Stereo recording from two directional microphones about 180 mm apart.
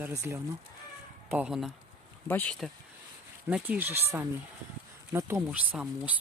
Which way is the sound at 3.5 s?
10° right (ahead or behind).